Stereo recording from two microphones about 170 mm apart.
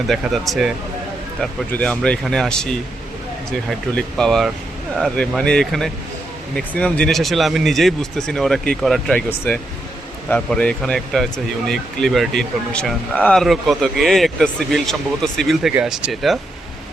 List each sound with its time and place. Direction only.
0.1 s speech: centre (ahead or behind)